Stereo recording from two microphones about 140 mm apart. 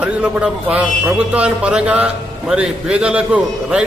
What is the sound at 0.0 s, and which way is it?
A man's voice, 10° right (ahead or behind).